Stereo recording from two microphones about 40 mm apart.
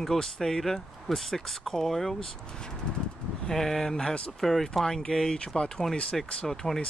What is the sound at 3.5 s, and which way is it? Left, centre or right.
Speech, centre.